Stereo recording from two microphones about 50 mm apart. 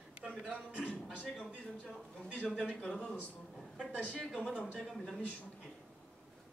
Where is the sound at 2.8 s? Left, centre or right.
Centre.